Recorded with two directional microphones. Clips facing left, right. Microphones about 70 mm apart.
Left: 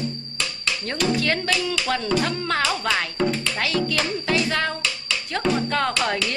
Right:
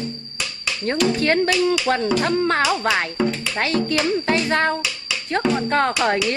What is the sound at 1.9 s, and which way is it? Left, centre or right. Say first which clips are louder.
Speech: right 4 dB; right.